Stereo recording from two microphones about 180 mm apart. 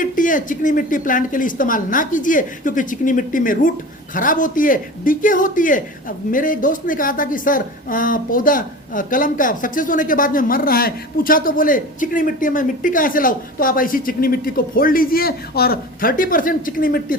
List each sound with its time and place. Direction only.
0.0 s a man's voice: 50° left (ahead or behind)